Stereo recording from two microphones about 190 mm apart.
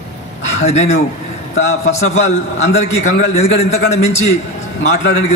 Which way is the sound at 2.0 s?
35° left (ahead or behind).